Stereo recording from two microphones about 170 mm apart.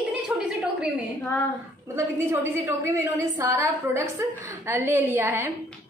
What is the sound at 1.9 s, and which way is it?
A woman's voice, 15° right (ahead or behind).